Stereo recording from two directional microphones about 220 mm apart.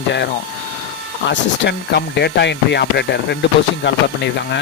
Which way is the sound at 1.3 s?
50° left (ahead or behind).